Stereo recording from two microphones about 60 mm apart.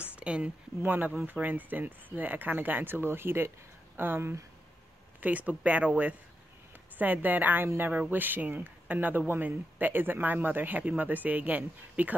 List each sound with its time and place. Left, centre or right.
0.1 s a sound: centre
0.8 s speech: right
5.2 s speech: right